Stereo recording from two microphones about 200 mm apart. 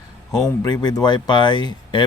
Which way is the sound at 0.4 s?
20° left (ahead or behind).